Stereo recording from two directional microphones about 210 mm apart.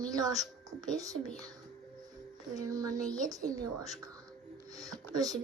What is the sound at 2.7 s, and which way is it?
A woman's voice, 15° right (ahead or behind).